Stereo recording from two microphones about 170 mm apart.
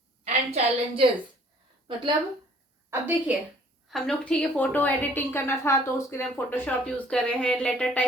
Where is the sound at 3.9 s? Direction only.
5° left (ahead or behind).